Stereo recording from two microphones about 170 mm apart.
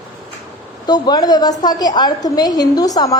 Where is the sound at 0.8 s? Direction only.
25° left (ahead or behind).